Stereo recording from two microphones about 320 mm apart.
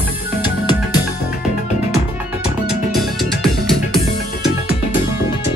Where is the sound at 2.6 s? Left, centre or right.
Centre.